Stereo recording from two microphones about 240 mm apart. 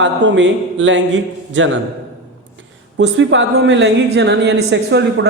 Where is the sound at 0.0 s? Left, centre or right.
Right.